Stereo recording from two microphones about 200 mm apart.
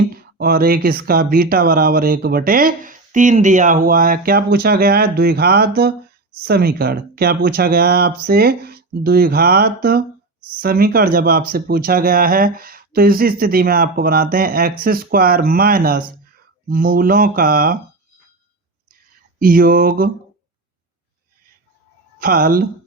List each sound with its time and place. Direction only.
0.1 s speech: 50° right (ahead or behind)
19.4 s speech: 45° right (ahead or behind)
22.2 s speech: 45° right (ahead or behind)